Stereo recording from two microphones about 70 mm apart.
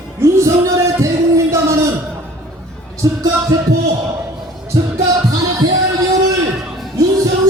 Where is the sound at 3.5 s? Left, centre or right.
Right.